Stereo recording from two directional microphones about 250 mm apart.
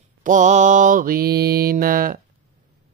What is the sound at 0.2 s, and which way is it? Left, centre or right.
Speech, right.